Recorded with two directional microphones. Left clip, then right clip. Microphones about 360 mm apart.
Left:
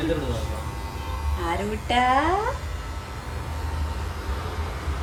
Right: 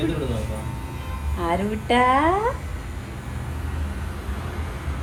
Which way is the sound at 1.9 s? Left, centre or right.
Centre.